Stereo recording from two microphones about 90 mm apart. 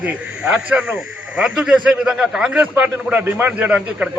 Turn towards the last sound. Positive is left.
turn(degrees=-15)  # may be behind; listen again after turning